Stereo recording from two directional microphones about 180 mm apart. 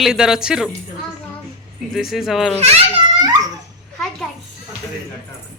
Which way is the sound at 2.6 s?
35° right (ahead or behind).